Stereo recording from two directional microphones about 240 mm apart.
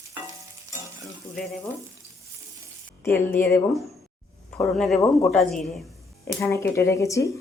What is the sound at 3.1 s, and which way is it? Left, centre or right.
Speech, centre.